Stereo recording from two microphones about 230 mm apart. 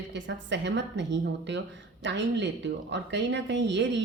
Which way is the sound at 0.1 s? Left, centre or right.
Right.